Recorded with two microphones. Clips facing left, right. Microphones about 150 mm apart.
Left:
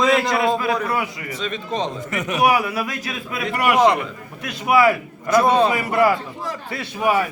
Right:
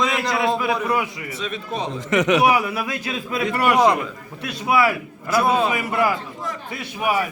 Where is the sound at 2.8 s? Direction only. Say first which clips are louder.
Right 2 dB; 25° right (ahead or behind).